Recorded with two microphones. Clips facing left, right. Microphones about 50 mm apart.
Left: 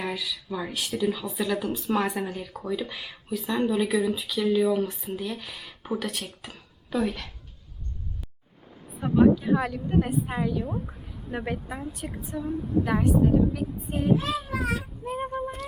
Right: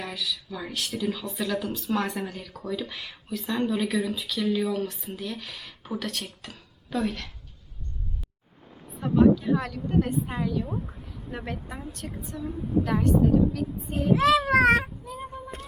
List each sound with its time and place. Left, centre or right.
0.0 s speech: centre
9.0 s speech: centre
14.1 s a child's voice: right
15.0 s speech: left